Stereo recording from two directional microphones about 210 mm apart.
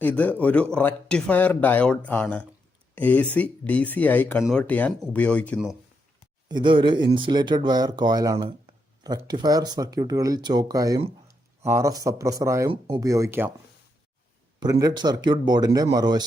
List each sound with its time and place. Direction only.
0.0 s a man's voice: 10° left (ahead or behind)
6.5 s speech: 20° right (ahead or behind)
14.6 s speech: 20° right (ahead or behind)